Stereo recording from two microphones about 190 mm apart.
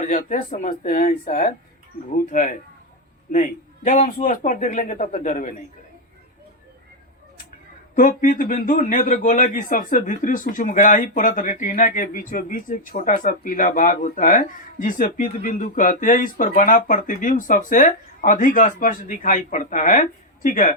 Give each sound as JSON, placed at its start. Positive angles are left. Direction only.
{"t": 0.0, "sound": "speech", "side_deg": 40}
{"t": 7.9, "sound": "speech", "side_deg": 45}